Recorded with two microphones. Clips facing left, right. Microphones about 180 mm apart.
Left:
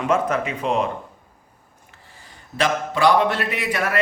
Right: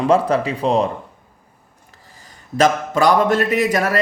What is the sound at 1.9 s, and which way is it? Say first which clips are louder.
Speech: right 1 dB; 40° right (ahead or behind).